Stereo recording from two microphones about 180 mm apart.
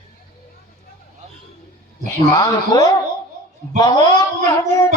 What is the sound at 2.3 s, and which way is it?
Mantra, 20° left (ahead or behind).